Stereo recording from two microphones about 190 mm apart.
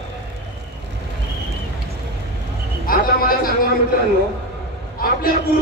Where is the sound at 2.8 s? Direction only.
50° left (ahead or behind).